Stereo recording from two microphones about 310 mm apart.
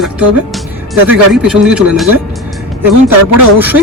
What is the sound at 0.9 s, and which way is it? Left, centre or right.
Speech, centre.